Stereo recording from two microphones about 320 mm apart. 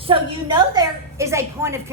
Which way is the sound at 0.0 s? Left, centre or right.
Centre.